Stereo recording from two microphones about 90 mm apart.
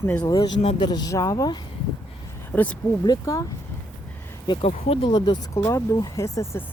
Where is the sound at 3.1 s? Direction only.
40° left (ahead or behind).